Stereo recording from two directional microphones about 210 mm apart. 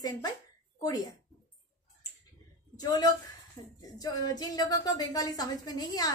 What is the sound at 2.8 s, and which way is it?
A woman's voice, 20° left (ahead or behind).